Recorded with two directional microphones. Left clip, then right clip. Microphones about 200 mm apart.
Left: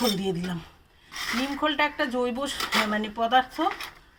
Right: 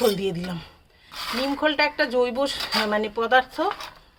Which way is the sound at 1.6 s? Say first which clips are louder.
Right 3 dB; 50° right (ahead or behind).